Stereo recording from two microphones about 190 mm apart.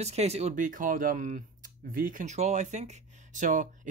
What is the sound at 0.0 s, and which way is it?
Speech, 35° right (ahead or behind).